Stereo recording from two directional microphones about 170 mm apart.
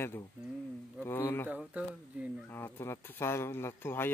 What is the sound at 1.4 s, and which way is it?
Speech, 10° right (ahead or behind).